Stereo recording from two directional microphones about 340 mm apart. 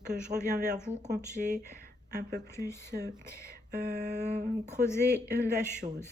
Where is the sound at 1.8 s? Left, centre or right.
Right.